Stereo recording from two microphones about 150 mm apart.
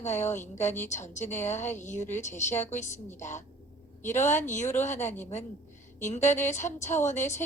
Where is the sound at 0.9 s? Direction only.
50° left (ahead or behind).